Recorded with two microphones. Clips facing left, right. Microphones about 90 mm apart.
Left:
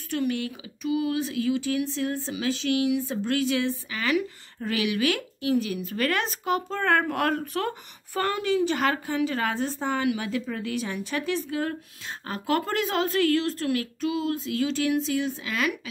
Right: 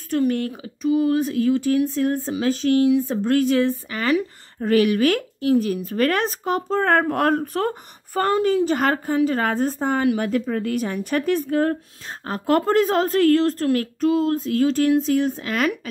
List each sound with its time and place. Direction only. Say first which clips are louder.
0.1 s speech: right 6 dB; 40° right (ahead or behind)